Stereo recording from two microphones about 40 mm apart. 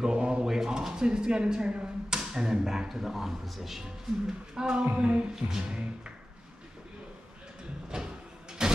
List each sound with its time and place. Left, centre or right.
0.0 s mechanisms: right
0.5 s speech: centre
4.6 s music: right
7.9 s a sound: centre